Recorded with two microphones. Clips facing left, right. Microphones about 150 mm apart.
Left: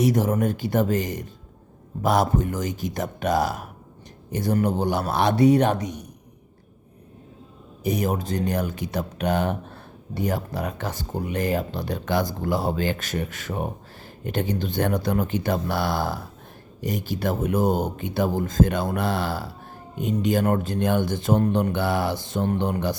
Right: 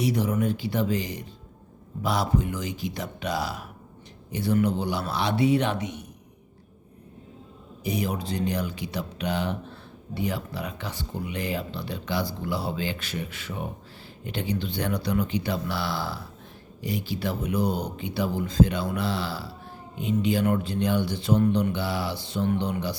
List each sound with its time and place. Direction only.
0.0 s speech: 45° left (ahead or behind)
7.9 s speech: 45° left (ahead or behind)